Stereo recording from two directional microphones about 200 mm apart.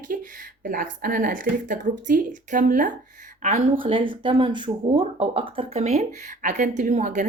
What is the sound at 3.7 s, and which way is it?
Speech, 25° right (ahead or behind).